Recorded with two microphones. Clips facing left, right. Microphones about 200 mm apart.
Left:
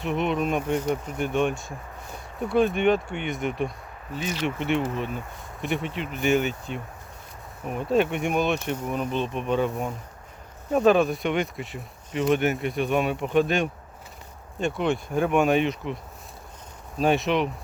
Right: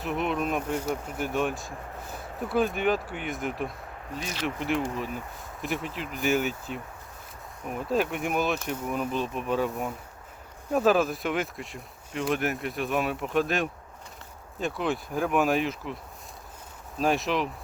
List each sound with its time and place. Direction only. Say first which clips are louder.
0.0 s speech: left 3 dB; centre (ahead or behind)
17.0 s speech: left 4 dB; centre (ahead or behind)